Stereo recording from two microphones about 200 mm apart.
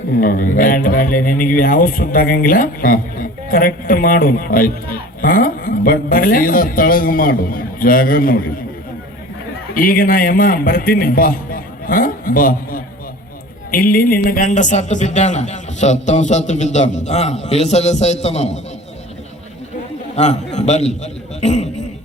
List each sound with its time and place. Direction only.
0.1 s speech: 45° left (ahead or behind)
9.7 s a man's voice: 45° left (ahead or behind)
20.1 s a man's voice: 35° left (ahead or behind)